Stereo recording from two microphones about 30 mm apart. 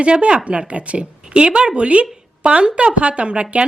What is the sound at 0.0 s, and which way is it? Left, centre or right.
A woman's voice, right.